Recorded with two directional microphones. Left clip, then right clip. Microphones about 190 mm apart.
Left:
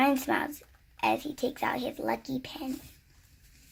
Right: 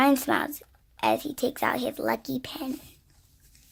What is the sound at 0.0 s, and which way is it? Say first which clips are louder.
A woman's voice: right 4 dB; 45° right (ahead or behind).